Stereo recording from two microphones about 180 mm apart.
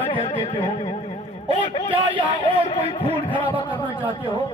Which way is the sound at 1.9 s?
30° right (ahead or behind).